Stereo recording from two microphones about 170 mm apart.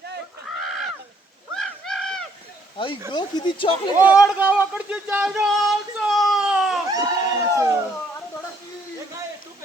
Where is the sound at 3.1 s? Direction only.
30° left (ahead or behind).